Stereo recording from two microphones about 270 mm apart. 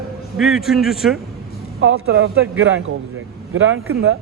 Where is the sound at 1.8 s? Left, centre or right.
Right.